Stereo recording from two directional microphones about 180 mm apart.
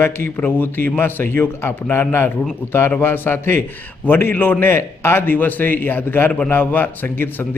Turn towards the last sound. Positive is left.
turn(degrees=10)  # may be behind; listen again after turning